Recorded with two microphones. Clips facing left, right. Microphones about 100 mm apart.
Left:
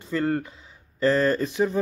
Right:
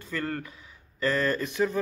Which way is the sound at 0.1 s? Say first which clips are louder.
Left 7 dB; 25° left (ahead or behind).